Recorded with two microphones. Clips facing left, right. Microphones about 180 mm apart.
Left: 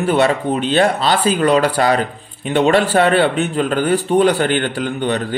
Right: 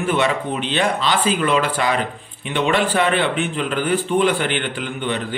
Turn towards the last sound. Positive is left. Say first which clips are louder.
# left 5 dB
turn(degrees=40)  # may be behind; listen again after turning